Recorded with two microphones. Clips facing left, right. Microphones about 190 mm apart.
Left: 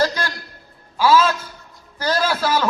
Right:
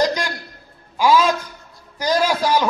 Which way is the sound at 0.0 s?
15° right (ahead or behind).